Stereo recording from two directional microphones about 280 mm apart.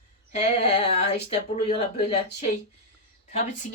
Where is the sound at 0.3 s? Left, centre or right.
Left.